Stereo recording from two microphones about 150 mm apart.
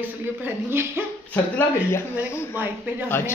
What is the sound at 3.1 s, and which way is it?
Speech, 15° left (ahead or behind).